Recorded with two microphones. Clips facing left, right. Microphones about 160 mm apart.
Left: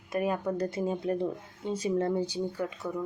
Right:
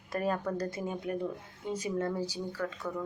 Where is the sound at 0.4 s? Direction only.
25° left (ahead or behind).